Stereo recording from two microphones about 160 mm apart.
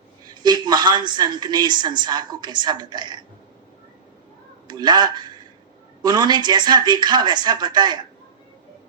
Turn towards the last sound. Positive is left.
turn(degrees=-25)  # may be behind; listen again after turning